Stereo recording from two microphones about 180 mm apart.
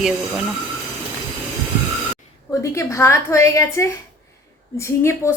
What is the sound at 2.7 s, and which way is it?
A woman's voice, 15° left (ahead or behind).